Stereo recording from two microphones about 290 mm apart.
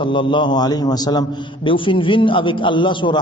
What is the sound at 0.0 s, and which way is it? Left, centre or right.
A man's voice, centre.